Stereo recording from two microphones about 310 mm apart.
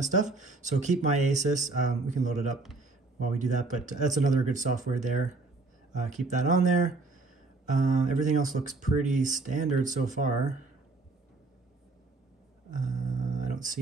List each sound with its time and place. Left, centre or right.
0.0 s speech: right
12.7 s music: right